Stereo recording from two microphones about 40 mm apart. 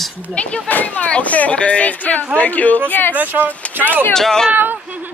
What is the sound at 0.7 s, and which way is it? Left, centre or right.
Speech, left.